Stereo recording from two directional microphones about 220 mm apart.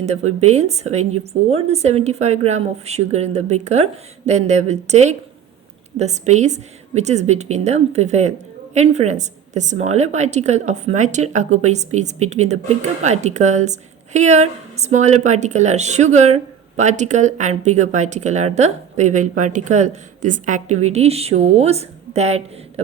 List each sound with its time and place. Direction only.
0.0 s a woman's voice: 30° right (ahead or behind)